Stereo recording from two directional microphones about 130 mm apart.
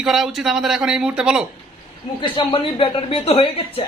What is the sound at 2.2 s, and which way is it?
Speech, 40° left (ahead or behind).